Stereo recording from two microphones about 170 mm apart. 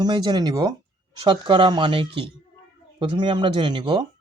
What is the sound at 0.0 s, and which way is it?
Speech, 25° right (ahead or behind).